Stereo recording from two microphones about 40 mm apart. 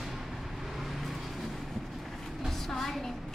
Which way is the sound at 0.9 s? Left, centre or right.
Centre.